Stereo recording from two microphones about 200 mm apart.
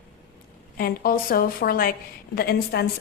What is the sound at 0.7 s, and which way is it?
A woman's voice, 50° left (ahead or behind).